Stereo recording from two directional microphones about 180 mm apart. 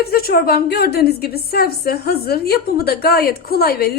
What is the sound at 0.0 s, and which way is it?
A woman's voice, 55° left (ahead or behind).